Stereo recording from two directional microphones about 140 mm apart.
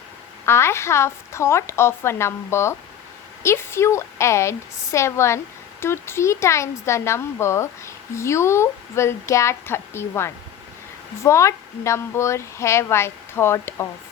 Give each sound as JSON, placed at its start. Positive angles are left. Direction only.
{"t": 0.4, "sound": "speech", "side_deg": 20}